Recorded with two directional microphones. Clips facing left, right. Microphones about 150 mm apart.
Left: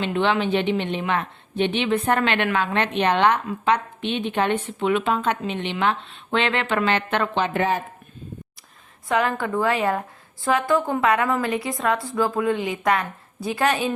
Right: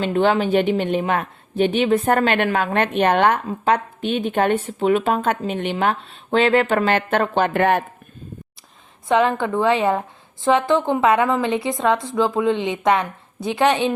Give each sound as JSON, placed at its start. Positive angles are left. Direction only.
{"t": 0.0, "sound": "a woman's voice", "side_deg": -45}
{"t": 9.4, "sound": "speech", "side_deg": -20}